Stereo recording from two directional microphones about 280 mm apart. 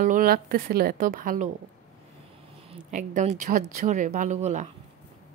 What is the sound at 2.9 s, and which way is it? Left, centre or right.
Speech, right.